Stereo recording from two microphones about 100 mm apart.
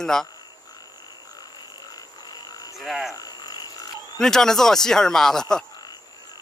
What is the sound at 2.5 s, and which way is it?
Frog, 35° left (ahead or behind).